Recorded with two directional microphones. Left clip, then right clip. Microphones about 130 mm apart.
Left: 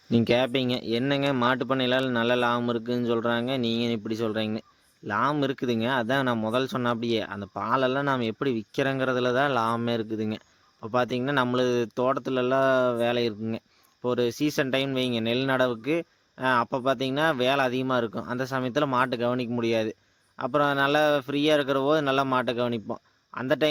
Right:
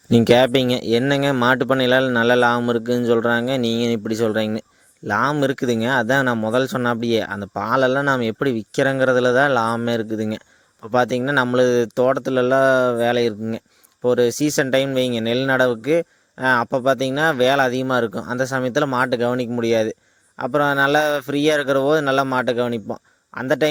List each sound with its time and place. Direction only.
0.1 s speech: 60° right (ahead or behind); by 23.6 s 40° right (ahead or behind)